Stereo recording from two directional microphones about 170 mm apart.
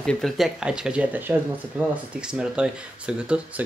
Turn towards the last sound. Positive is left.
turn(degrees=-5)  # may be behind; listen again after turning